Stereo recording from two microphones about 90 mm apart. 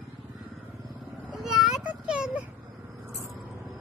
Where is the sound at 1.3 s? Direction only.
Centre (ahead or behind).